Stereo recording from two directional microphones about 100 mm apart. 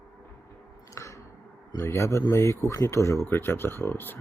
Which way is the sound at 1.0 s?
30° left (ahead or behind).